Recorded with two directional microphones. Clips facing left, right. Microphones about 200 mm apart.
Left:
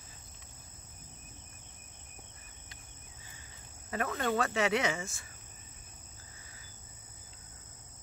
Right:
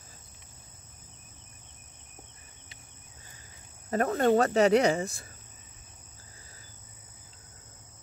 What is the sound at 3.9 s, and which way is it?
Speech, 40° right (ahead or behind).